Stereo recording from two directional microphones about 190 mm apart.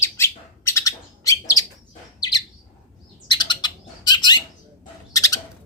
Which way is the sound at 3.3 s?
20° left (ahead or behind).